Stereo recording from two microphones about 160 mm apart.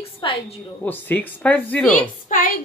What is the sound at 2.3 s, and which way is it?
Speech, 60° left (ahead or behind).